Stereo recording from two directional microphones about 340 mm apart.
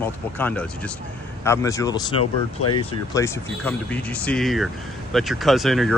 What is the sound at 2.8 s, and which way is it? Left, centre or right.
Speech, centre.